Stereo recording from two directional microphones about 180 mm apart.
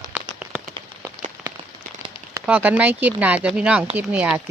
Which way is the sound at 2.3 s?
10° right (ahead or behind).